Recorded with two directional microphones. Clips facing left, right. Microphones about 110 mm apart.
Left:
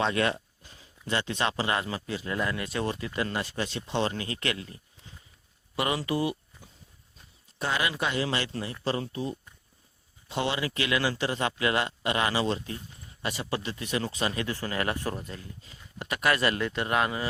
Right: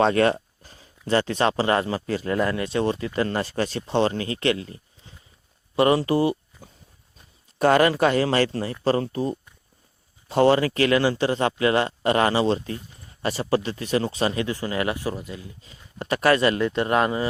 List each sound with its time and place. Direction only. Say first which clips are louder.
0.0 s speech: right 8 dB; 40° right (ahead or behind)
3.2 s speech: right 7 dB; 45° right (ahead or behind)
7.6 s speech: right 12 dB; 50° right (ahead or behind); by 14.9 s 20° right (ahead or behind)
14.9 s speech: right 4 dB; 5° right (ahead or behind)
15.4 s speech: right 3 dB; 25° right (ahead or behind)